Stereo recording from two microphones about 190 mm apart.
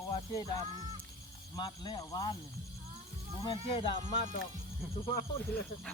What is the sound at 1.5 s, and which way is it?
Speech, 25° left (ahead or behind).